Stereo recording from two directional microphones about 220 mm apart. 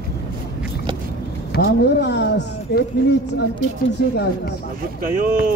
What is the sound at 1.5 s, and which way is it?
Speech, 50° left (ahead or behind).